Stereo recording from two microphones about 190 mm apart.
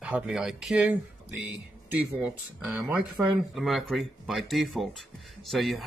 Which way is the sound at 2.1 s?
5° right (ahead or behind).